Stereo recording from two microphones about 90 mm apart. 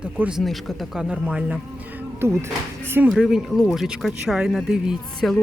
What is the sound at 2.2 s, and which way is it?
Speech, 30° right (ahead or behind).